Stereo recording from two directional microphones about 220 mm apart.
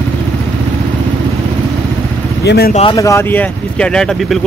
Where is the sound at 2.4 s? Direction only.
45° left (ahead or behind).